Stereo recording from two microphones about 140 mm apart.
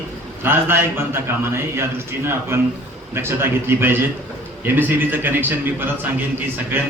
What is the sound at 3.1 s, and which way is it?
A man's voice, 15° right (ahead or behind).